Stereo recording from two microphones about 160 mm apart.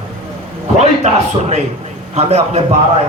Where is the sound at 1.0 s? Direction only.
45° right (ahead or behind).